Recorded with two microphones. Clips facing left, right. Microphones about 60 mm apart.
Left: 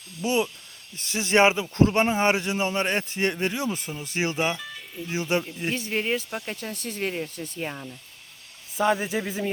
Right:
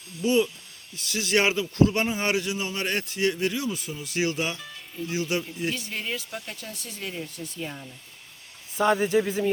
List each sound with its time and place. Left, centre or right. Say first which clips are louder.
0.2 s speech: right 2 dB; left
2.8 s speech: left 1 dB; left
8.8 s speech: right 2 dB; centre